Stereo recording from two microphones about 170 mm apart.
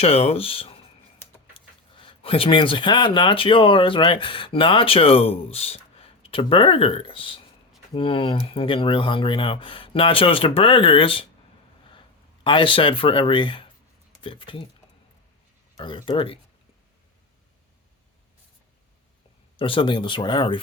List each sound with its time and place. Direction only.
0.0 s speech: 35° left (ahead or behind)
15.8 s speech: 30° left (ahead or behind)
19.5 s speech: 30° left (ahead or behind)